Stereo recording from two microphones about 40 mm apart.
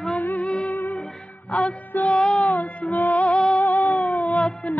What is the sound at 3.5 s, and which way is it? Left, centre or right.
Cat, left.